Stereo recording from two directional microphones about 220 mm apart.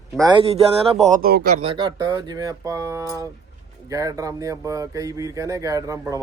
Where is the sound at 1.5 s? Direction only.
25° right (ahead or behind).